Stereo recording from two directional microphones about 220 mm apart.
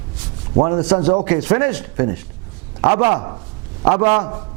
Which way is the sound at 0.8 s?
15° right (ahead or behind).